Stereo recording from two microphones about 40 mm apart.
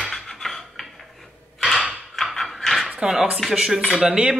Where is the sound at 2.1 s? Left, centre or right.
Centre.